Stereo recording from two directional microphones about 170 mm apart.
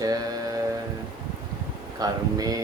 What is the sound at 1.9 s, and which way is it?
Speech, 20° right (ahead or behind).